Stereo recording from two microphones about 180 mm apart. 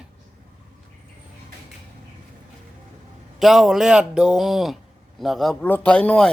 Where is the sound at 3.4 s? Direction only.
Centre (ahead or behind).